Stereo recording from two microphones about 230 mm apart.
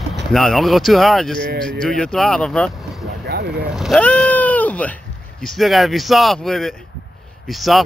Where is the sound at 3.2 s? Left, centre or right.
Right.